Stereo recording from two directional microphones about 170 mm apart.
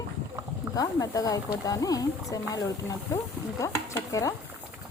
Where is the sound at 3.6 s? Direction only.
20° left (ahead or behind).